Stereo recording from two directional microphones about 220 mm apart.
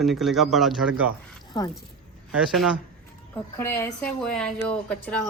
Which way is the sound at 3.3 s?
10° left (ahead or behind).